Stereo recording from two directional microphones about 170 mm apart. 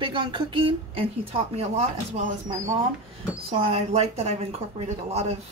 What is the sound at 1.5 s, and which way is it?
A woman's voice, 40° right (ahead or behind).